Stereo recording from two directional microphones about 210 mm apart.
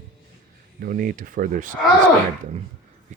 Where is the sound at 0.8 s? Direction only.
40° right (ahead or behind).